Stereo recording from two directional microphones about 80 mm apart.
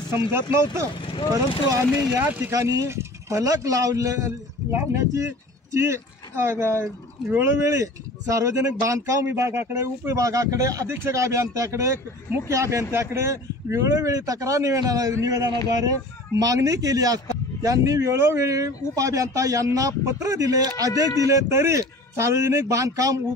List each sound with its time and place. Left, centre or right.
0.1 s speech: right
2.1 s speech: right
2.5 s a man's voice: right
4.6 s a man's voice: right
21.3 s speech: right